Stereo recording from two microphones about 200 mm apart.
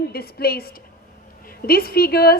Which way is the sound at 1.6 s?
50° left (ahead or behind).